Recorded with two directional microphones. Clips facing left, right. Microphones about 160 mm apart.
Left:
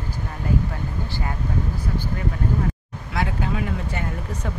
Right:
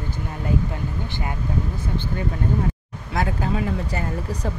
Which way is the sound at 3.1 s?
35° right (ahead or behind).